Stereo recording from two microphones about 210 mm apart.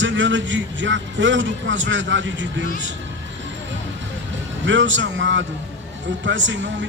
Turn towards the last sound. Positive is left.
turn(degrees=-60)  # may be behind; listen again after turning